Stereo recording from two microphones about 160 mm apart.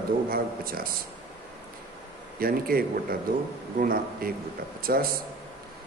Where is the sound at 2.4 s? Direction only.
65° right (ahead or behind).